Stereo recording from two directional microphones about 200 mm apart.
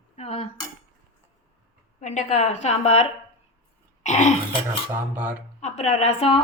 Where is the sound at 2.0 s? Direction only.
35° left (ahead or behind).